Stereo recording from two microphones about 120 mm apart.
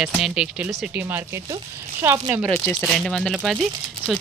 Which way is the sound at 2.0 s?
20° right (ahead or behind).